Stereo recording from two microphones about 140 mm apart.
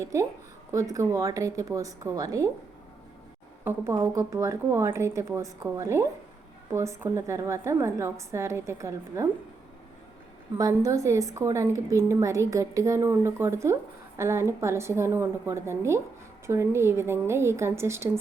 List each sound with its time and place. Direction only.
0.0 s a woman's voice: 20° right (ahead or behind)
3.6 s a woman's voice: 15° right (ahead or behind)
10.6 s a woman's voice: 20° right (ahead or behind)